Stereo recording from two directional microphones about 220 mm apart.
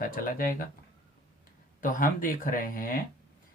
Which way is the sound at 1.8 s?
40° left (ahead or behind).